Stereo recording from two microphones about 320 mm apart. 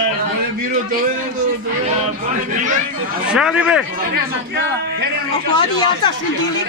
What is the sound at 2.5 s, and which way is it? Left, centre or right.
Speech, right.